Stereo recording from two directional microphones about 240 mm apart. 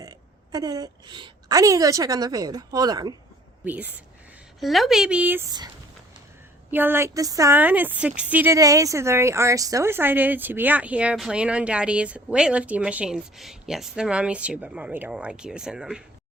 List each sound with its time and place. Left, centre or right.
0.0 s a woman's voice: centre